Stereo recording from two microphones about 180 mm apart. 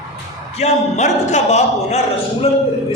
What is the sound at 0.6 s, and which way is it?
A man's voice, 40° left (ahead or behind).